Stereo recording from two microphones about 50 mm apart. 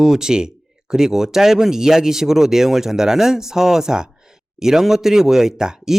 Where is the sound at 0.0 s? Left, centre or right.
Centre.